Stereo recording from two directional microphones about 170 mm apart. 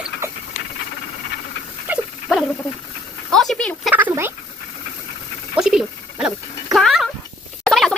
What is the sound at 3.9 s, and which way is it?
Speech, 10° right (ahead or behind).